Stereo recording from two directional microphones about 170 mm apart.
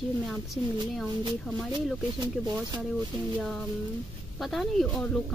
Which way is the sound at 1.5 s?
5° left (ahead or behind).